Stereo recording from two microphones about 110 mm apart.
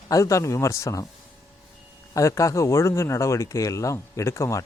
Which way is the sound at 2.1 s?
30° left (ahead or behind).